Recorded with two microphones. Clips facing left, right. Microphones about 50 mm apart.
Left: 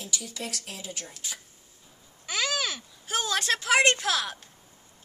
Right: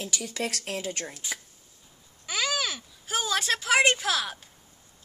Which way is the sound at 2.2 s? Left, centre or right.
Centre.